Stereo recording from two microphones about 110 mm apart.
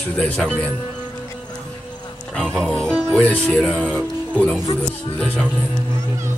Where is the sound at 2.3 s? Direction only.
5° left (ahead or behind).